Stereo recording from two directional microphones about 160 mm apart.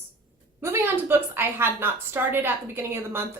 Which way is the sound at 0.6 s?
15° right (ahead or behind).